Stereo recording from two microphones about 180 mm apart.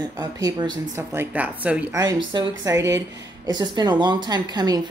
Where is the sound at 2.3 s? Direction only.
20° right (ahead or behind).